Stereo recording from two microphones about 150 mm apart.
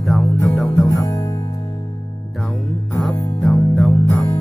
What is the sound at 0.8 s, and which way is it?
Music, 20° left (ahead or behind).